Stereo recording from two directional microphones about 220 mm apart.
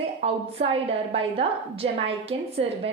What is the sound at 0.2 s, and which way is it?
A woman's voice, 25° right (ahead or behind).